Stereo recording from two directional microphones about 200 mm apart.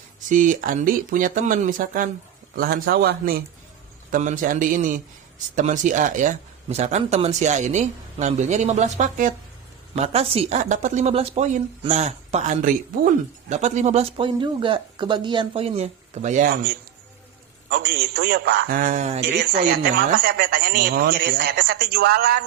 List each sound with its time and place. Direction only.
0.3 s a man's voice: 40° right (ahead or behind)
17.7 s a man's voice: 55° right (ahead or behind); by 19.2 s 35° right (ahead or behind)
19.3 s speech: 55° right (ahead or behind)